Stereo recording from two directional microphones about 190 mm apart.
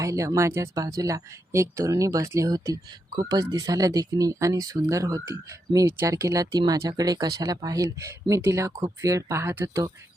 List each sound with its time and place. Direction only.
0.0 s speech: 15° right (ahead or behind)